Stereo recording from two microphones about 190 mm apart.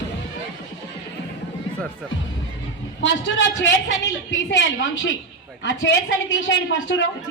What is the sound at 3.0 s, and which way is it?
A woman's voice, 70° left (ahead or behind).